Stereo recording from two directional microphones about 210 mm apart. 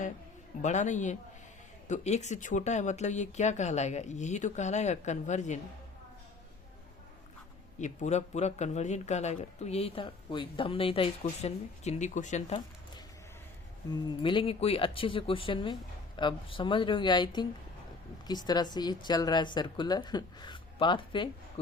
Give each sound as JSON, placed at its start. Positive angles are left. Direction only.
{"t": 0.6, "sound": "speech", "side_deg": 35}
{"t": 7.8, "sound": "speech", "side_deg": 35}
{"t": 13.9, "sound": "speech", "side_deg": 25}